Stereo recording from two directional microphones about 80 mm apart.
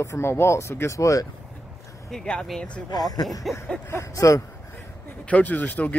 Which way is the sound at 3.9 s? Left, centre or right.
Left.